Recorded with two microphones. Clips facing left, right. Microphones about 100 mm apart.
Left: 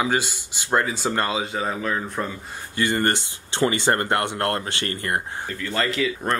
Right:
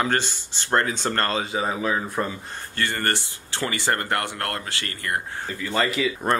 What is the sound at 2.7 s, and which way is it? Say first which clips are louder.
Speech: left 4 dB; 15° left (ahead or behind).